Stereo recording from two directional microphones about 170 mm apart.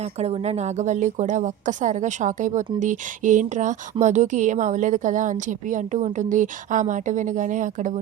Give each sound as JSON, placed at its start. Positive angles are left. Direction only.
{"t": 0.0, "sound": "a woman's voice", "side_deg": -40}